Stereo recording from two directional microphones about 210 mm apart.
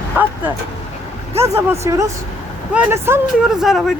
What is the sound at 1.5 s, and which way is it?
Speech, 10° right (ahead or behind).